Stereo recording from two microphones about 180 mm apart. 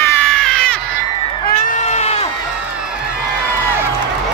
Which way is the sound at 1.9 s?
35° left (ahead or behind).